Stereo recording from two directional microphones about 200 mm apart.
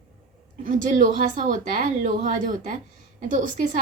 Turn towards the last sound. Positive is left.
turn(degrees=-40)  # may be behind; listen again after turning